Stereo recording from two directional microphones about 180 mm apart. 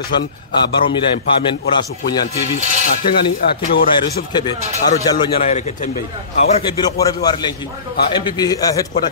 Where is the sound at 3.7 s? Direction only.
60° left (ahead or behind).